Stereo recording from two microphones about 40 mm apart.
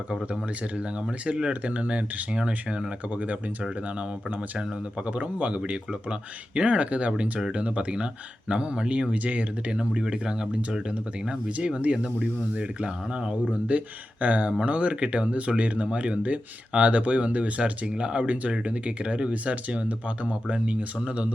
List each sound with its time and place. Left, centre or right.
1.2 s speech: right
5.0 s speech: right
7.2 s speech: centre
7.5 s speech: right
9.7 s speech: right
11.3 s speech: right